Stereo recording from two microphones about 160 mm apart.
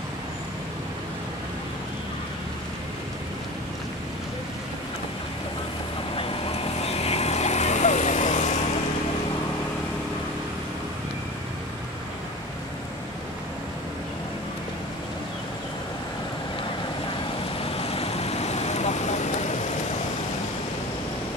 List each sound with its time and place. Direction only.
6.1 s vehicle: 40° left (ahead or behind)
17.7 s vehicle: 40° left (ahead or behind)